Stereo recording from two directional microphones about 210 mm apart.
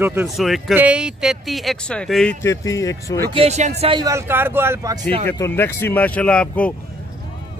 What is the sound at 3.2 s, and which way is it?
Speech, 25° right (ahead or behind).